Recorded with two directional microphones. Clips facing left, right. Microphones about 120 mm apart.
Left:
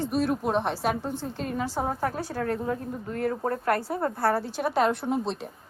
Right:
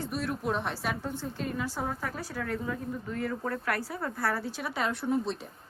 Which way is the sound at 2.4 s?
50° left (ahead or behind).